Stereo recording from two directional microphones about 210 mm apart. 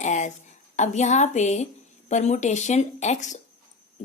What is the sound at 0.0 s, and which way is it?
A woman's voice, 35° left (ahead or behind).